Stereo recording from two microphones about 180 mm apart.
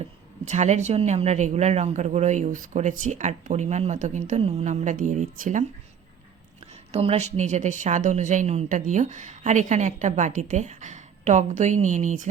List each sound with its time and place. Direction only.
0.4 s speech: 40° right (ahead or behind)
6.9 s speech: 35° right (ahead or behind)